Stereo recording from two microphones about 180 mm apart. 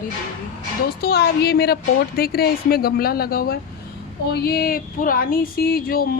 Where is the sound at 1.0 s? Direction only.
65° left (ahead or behind).